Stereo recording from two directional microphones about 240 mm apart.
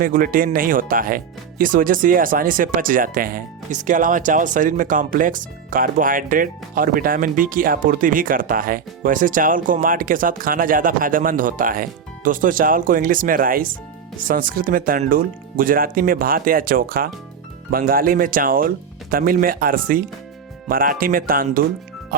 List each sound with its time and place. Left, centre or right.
0.0 s speech: right